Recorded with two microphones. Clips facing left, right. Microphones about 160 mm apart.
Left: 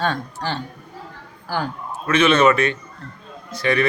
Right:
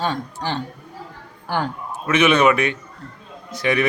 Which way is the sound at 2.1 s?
15° right (ahead or behind).